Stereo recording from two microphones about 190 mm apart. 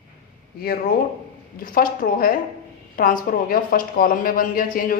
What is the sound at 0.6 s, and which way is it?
A woman's voice, 50° left (ahead or behind).